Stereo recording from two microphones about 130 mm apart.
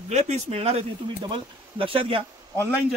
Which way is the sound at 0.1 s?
55° right (ahead or behind).